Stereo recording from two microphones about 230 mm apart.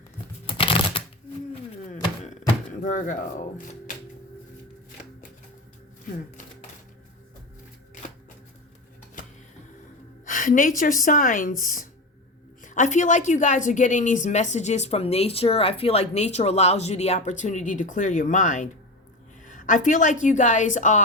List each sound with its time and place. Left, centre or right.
0.4 s shuffling cards: left
1.7 s a sound: left
2.8 s a woman's voice: left
10.2 s a woman's voice: left